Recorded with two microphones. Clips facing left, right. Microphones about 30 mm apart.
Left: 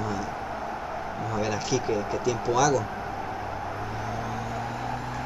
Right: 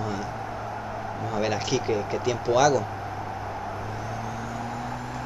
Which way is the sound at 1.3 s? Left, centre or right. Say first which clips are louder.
Right 2 dB; right.